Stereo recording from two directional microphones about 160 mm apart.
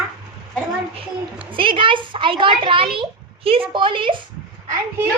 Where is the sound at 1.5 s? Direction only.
30° right (ahead or behind).